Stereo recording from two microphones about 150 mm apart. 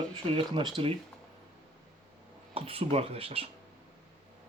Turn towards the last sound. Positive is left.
turn(degrees=-40)  # may be behind; listen again after turning